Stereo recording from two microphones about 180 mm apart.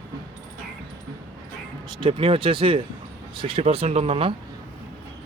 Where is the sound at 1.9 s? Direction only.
30° right (ahead or behind).